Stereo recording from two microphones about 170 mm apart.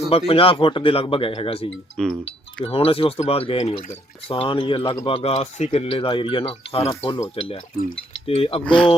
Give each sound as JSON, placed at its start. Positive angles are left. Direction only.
{"t": 0.1, "sound": "speech", "side_deg": 35}
{"t": 2.0, "sound": "speech", "side_deg": 5}
{"t": 2.6, "sound": "speech", "side_deg": 35}
{"t": 8.6, "sound": "speech", "side_deg": 5}